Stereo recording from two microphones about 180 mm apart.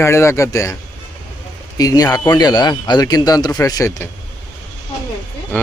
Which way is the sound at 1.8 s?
20° left (ahead or behind).